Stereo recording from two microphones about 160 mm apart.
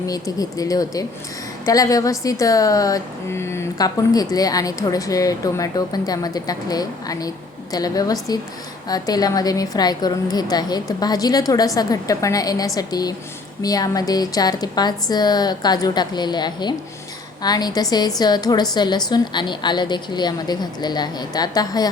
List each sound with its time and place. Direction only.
0.1 s speech: 20° left (ahead or behind)